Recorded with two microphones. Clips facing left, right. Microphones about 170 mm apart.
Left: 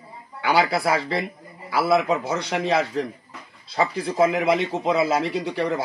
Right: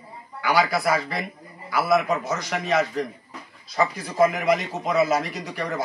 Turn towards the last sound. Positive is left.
turn(degrees=30)  # may be behind; listen again after turning